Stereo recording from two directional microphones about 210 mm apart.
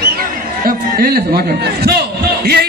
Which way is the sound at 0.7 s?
45° right (ahead or behind).